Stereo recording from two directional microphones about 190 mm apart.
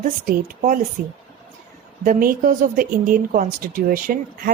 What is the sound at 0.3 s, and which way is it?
Speech, 50° right (ahead or behind).